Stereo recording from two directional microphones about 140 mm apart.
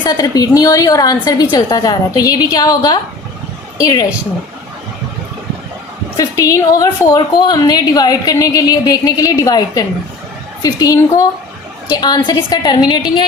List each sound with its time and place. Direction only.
0.0 s a woman's voice: 25° left (ahead or behind)
6.1 s a woman's voice: 25° left (ahead or behind)